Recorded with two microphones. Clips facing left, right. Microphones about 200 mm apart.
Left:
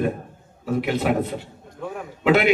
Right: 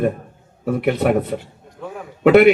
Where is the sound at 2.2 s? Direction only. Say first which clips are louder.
Right 7 dB; 55° right (ahead or behind).